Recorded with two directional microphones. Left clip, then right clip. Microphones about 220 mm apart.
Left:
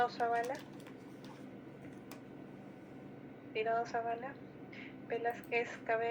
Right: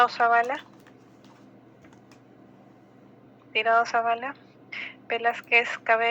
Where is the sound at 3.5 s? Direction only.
40° right (ahead or behind).